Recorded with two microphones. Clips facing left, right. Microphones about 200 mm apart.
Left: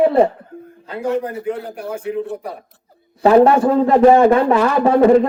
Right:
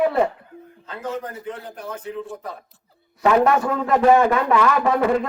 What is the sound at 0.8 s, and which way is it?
A man's voice, 10° left (ahead or behind).